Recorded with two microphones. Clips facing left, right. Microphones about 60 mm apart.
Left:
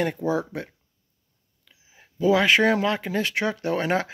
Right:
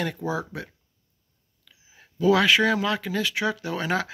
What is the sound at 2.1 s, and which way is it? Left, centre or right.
Speech, left.